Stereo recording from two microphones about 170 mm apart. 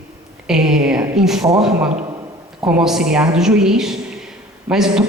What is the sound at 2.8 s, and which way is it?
A woman's voice, 5° right (ahead or behind).